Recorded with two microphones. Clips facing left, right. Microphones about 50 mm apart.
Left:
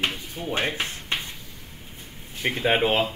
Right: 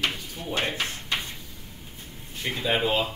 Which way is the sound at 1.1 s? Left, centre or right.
Left.